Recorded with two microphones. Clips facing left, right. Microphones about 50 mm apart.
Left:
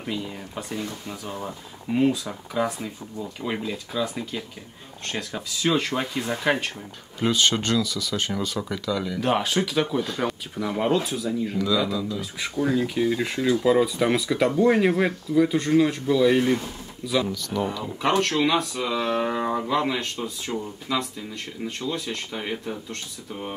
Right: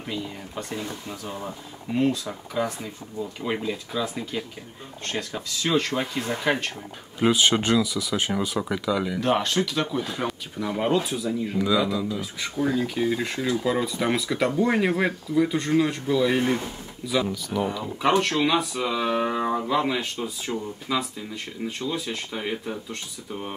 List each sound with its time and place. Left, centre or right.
0.0 s speech: centre
7.2 s speech: centre
9.2 s speech: centre
10.0 s speech: centre
11.5 s speech: centre
12.2 s speech: centre